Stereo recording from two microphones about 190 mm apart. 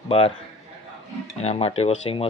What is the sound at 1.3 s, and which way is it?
Speech, 35° left (ahead or behind).